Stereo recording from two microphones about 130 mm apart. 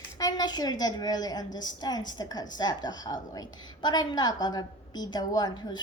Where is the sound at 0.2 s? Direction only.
30° left (ahead or behind).